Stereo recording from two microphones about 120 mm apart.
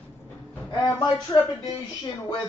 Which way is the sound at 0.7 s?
35° left (ahead or behind).